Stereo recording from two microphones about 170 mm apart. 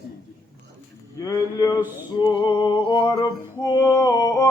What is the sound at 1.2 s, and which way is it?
Music, 20° left (ahead or behind).